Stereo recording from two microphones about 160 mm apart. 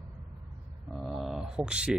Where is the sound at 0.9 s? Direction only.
Centre (ahead or behind).